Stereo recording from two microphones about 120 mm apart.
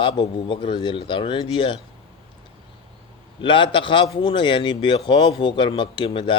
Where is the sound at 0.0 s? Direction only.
45° left (ahead or behind).